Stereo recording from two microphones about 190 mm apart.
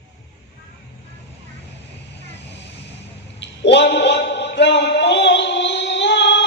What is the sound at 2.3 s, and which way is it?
Vehicle, 65° left (ahead or behind).